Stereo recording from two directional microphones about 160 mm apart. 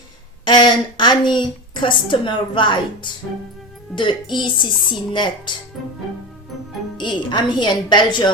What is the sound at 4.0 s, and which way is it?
Speech, 30° left (ahead or behind).